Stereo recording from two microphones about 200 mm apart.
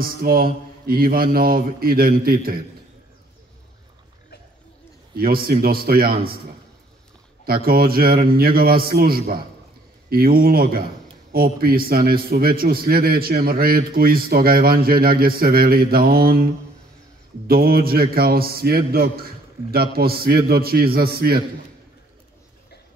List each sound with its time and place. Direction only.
0.0 s a man's voice: 50° right (ahead or behind)
5.1 s a man's voice: 50° right (ahead or behind)
7.4 s a man's voice: 50° right (ahead or behind)
17.5 s a man's voice: 50° right (ahead or behind)